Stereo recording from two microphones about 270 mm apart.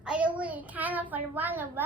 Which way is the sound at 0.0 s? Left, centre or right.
Centre.